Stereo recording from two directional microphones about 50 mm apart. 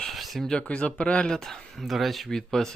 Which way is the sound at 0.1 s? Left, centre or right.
Centre.